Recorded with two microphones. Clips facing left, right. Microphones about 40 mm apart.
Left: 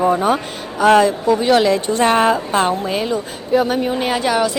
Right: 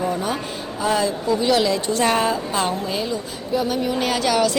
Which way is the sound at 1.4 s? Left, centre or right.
Left.